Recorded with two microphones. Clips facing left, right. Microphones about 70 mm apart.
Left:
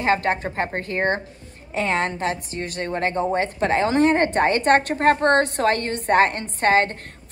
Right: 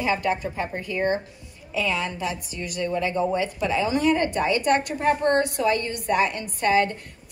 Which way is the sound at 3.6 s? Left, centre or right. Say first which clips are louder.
Left 4 dB; left.